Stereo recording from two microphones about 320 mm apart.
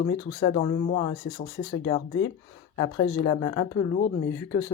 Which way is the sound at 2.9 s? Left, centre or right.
Left.